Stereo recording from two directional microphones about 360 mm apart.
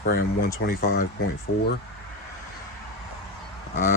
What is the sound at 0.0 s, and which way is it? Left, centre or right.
Speech, left.